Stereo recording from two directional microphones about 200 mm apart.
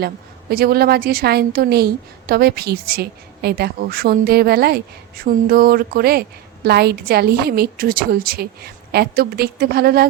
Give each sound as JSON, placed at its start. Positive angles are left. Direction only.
{"t": 0.5, "sound": "a woman's voice", "side_deg": -50}